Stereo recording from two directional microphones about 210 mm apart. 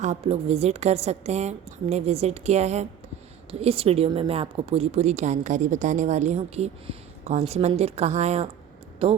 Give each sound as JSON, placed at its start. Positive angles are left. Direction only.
{"t": 0.0, "sound": "a woman's voice", "side_deg": -30}